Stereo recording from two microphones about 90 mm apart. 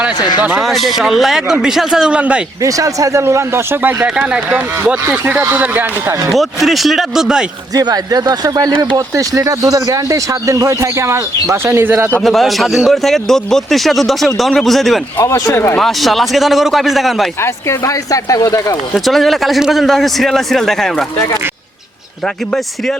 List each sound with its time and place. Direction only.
0.2 s speech: 50° left (ahead or behind)
0.6 s speech: centre (ahead or behind)
2.6 s speech: 40° right (ahead or behind)
4.0 s speech: 15° right (ahead or behind)
6.3 s speech: centre (ahead or behind)
7.8 s speech: 45° right (ahead or behind); by 12.0 s 25° right (ahead or behind)
12.2 s speech: centre (ahead or behind)
15.3 s speech: 30° left (ahead or behind)
15.8 s speech: centre (ahead or behind)
17.4 s speech: 35° left (ahead or behind)
18.9 s speech: centre (ahead or behind)